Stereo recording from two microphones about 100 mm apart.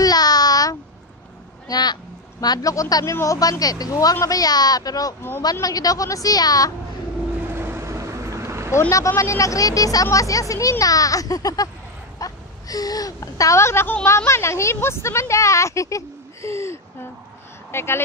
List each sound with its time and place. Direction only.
0.0 s a sound: 40° left (ahead or behind)
1.7 s speech: 45° left (ahead or behind)
7.5 s vehicle: 25° right (ahead or behind)
9.2 s a woman's voice: 30° left (ahead or behind)